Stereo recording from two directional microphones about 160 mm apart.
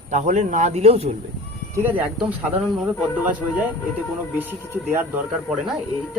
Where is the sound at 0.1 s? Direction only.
50° right (ahead or behind).